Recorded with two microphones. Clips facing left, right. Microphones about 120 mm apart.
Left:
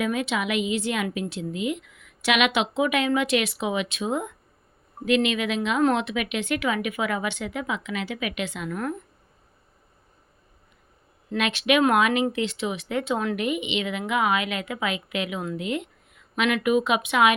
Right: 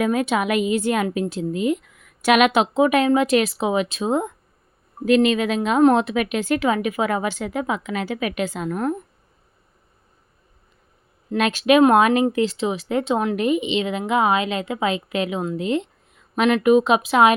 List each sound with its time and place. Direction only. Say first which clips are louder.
0.0 s a woman's voice: right 5 dB; 45° right (ahead or behind)
8.7 s speech: right 6 dB; 25° right (ahead or behind)
11.3 s speech: right 6 dB; 40° right (ahead or behind)